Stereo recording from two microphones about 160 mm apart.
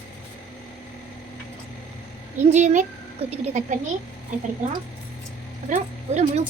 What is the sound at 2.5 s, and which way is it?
A woman's voice, 45° right (ahead or behind).